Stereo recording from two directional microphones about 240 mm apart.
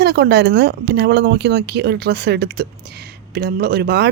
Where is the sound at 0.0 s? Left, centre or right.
Right.